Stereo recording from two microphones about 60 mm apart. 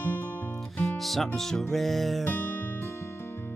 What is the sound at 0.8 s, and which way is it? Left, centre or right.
Music, centre.